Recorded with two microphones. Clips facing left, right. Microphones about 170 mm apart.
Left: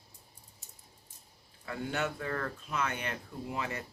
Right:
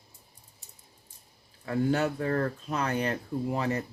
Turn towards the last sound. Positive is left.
turn(degrees=-40)  # may be behind; listen again after turning